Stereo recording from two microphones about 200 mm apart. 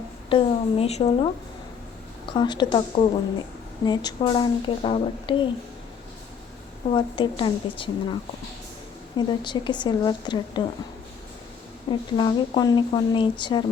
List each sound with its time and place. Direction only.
0.3 s speech: 25° left (ahead or behind)
6.9 s speech: 25° left (ahead or behind)
9.1 s speech: 20° left (ahead or behind)
11.9 s speech: 25° left (ahead or behind)